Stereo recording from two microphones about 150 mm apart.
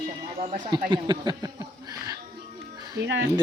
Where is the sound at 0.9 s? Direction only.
30° right (ahead or behind).